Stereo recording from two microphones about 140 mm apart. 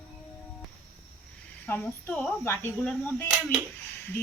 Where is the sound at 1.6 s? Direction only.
15° left (ahead or behind).